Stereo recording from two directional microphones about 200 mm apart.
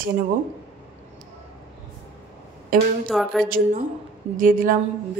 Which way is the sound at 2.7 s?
45° right (ahead or behind).